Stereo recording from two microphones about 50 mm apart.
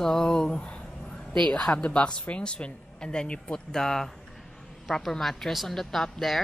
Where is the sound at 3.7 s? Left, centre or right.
Centre.